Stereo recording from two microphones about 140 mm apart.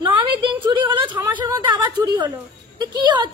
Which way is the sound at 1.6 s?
30° right (ahead or behind).